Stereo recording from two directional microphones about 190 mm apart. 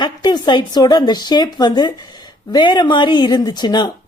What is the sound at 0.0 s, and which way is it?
Speech, 20° left (ahead or behind).